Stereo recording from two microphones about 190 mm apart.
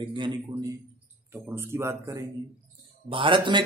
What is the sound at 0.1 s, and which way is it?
Speech, 25° right (ahead or behind).